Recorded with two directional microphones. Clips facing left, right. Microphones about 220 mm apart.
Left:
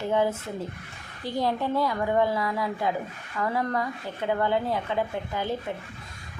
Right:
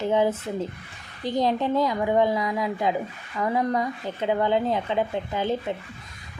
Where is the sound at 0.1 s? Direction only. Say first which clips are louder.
Right 2 dB; 20° right (ahead or behind).